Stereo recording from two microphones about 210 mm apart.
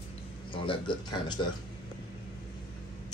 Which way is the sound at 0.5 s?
25° left (ahead or behind).